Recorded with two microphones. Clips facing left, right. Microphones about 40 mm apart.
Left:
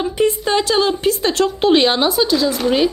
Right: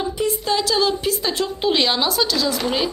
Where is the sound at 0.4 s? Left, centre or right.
Left.